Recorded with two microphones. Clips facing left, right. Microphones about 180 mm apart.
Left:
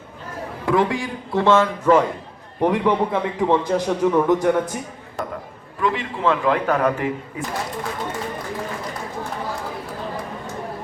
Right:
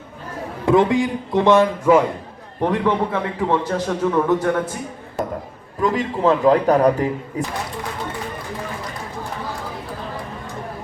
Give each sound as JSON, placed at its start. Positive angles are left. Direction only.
{"t": 0.6, "sound": "a man's voice", "side_deg": -20}
{"t": 2.6, "sound": "a man's voice", "side_deg": 15}
{"t": 5.8, "sound": "a man's voice", "side_deg": -40}